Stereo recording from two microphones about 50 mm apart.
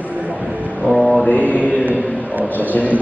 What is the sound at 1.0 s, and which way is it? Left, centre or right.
Mantra, left.